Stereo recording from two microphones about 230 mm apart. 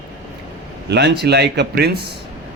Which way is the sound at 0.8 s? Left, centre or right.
Right.